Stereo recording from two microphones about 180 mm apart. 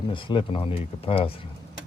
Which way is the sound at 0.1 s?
30° left (ahead or behind).